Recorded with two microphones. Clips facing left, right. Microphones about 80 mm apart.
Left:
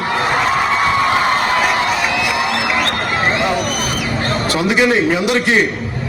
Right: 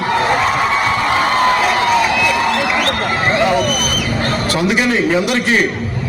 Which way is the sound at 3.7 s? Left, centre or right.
Left.